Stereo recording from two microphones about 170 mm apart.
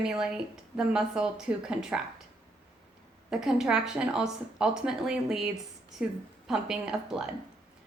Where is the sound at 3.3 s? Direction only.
5° right (ahead or behind).